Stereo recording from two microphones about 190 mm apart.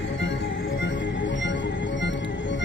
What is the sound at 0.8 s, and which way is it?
Music, 70° left (ahead or behind).